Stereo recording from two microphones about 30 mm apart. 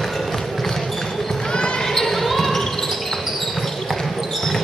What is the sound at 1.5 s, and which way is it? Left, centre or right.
Basketball bounce, left.